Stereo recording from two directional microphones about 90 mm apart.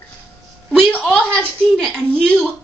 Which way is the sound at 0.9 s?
10° left (ahead or behind).